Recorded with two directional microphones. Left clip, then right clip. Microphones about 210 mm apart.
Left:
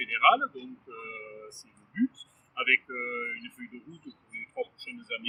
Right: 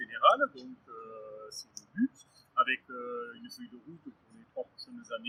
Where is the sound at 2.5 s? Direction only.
5° left (ahead or behind).